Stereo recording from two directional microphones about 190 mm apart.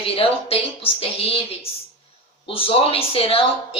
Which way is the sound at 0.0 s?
30° left (ahead or behind).